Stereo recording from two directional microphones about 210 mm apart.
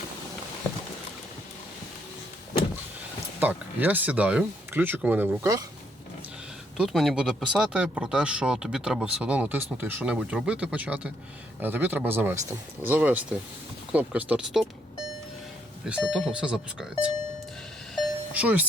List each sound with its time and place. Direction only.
3.4 s speech: 10° right (ahead or behind)
6.7 s speech: centre (ahead or behind)
17.9 s a sound: 5° right (ahead or behind)